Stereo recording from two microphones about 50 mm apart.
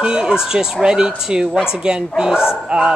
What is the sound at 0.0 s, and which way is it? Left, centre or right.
Speech, centre.